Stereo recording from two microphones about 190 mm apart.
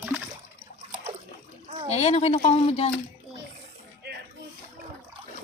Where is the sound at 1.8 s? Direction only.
35° left (ahead or behind).